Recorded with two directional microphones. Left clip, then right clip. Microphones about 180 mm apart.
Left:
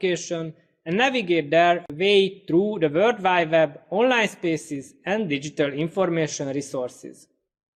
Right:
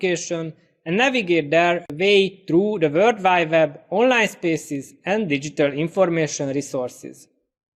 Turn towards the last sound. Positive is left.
turn(degrees=-40)  # may be behind; listen again after turning